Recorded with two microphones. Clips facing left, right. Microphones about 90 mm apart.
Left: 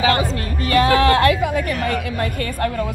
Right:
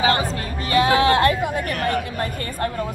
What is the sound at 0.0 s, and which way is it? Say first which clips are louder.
Speech: left 2 dB; 30° right (ahead or behind).